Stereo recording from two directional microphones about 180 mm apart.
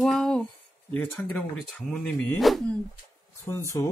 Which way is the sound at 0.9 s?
5° left (ahead or behind).